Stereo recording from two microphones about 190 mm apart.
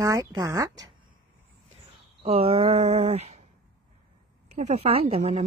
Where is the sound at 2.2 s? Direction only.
30° right (ahead or behind).